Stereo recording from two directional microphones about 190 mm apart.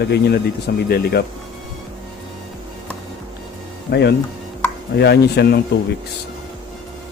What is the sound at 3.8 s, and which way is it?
Speech, 60° left (ahead or behind).